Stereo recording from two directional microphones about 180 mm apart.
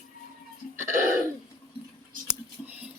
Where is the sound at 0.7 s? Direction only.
40° right (ahead or behind).